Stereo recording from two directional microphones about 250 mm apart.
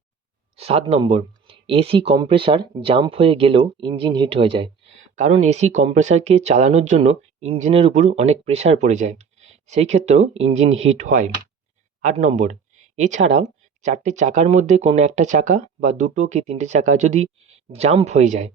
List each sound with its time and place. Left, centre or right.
0.5 s speech: right